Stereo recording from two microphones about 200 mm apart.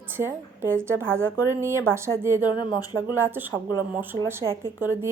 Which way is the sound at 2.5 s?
20° left (ahead or behind).